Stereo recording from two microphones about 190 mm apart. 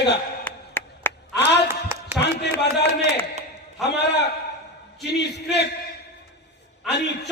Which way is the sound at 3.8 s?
65° left (ahead or behind).